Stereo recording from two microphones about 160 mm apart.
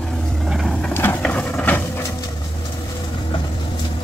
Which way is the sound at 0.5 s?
Centre (ahead or behind).